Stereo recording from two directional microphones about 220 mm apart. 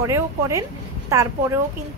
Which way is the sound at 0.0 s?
15° right (ahead or behind).